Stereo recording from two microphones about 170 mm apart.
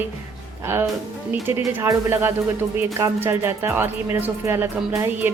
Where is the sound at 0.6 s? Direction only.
15° right (ahead or behind).